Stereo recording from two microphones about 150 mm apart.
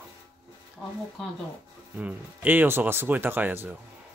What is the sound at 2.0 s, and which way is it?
Speech, 10° right (ahead or behind).